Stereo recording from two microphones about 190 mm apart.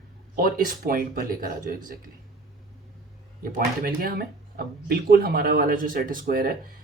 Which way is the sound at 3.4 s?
50° right (ahead or behind).